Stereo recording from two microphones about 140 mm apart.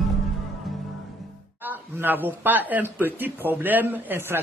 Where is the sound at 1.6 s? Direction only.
15° right (ahead or behind).